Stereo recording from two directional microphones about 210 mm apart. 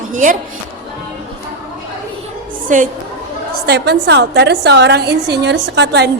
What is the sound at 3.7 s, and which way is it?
A woman's voice, 55° right (ahead or behind).